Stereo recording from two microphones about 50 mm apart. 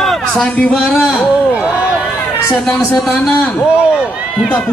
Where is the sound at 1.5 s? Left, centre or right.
Right.